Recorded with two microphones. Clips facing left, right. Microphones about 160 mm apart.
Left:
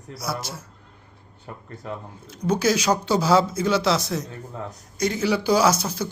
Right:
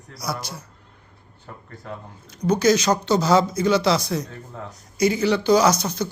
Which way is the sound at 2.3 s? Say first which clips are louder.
Right 3 dB; 5° left (ahead or behind).